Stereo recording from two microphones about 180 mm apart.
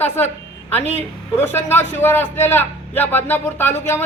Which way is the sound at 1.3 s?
15° left (ahead or behind).